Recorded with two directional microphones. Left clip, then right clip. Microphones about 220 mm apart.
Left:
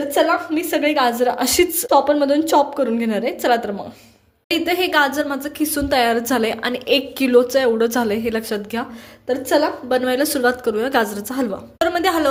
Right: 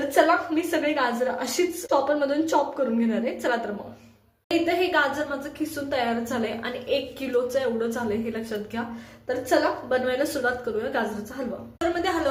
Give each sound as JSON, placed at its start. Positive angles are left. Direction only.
{"t": 0.1, "sound": "a woman's voice", "side_deg": 40}
{"t": 4.6, "sound": "a woman's voice", "side_deg": 50}